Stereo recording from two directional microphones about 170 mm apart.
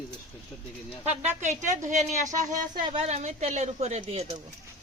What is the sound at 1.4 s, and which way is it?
A woman's voice, 45° right (ahead or behind).